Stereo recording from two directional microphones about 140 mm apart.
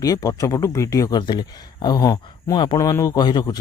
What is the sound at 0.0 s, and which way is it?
Speech, 25° left (ahead or behind).